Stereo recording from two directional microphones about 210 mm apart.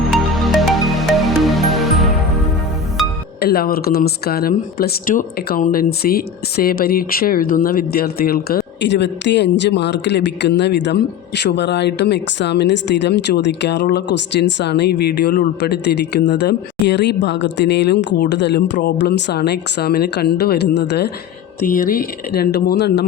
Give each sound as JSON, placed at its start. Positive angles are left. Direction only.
{"t": 0.1, "sound": "music", "side_deg": 0}
{"t": 3.4, "sound": "speech", "side_deg": 45}
{"t": 21.7, "sound": "speech", "side_deg": 40}